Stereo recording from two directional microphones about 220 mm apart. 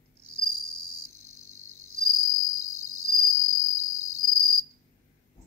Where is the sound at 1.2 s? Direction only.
75° left (ahead or behind).